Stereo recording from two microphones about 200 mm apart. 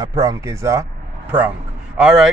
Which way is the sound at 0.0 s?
20° right (ahead or behind).